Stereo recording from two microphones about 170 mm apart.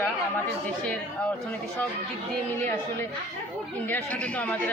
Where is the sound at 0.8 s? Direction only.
5° left (ahead or behind).